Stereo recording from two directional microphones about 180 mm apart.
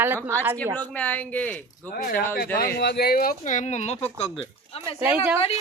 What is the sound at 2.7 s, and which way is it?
Speech, 65° left (ahead or behind).